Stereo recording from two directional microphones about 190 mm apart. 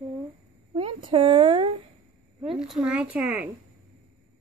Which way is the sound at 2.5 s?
5° right (ahead or behind).